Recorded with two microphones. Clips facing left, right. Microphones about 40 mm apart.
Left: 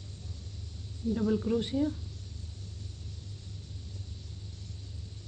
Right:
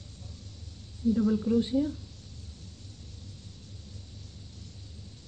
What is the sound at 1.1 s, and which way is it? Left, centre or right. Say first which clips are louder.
Speech: right 2 dB; centre.